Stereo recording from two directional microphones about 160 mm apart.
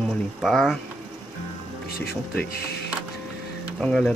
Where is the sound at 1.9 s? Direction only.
75° left (ahead or behind).